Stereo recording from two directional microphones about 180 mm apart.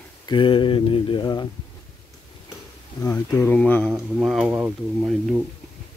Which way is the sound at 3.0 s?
15° left (ahead or behind).